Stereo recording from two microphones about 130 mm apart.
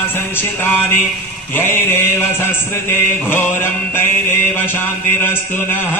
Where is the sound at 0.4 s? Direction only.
15° left (ahead or behind).